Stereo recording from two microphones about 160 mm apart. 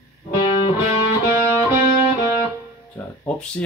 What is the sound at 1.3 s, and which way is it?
Music, 15° right (ahead or behind).